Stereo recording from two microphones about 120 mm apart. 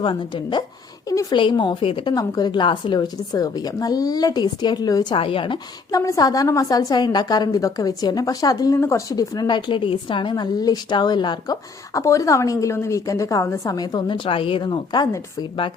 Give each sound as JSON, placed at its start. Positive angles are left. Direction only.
{"t": 0.0, "sound": "a woman's voice", "side_deg": 40}
{"t": 1.0, "sound": "a woman's voice", "side_deg": 30}
{"t": 1.4, "sound": "a woman's voice", "side_deg": 40}
{"t": 2.1, "sound": "a woman's voice", "side_deg": 35}
{"t": 5.1, "sound": "a woman's voice", "side_deg": 45}
{"t": 5.9, "sound": "a woman's voice", "side_deg": 30}
{"t": 11.9, "sound": "a woman's voice", "side_deg": 25}